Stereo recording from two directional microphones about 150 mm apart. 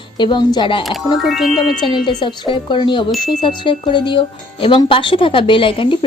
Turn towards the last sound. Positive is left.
turn(degrees=35)  # may be behind; listen again after turning